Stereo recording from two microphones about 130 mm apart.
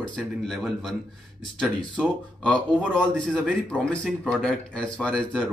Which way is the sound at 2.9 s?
5° left (ahead or behind).